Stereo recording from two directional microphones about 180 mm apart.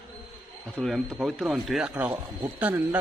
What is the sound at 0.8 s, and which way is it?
A man's voice, centre (ahead or behind).